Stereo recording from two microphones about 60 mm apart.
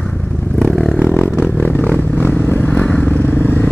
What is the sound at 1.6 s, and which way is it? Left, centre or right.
Vehicle, left.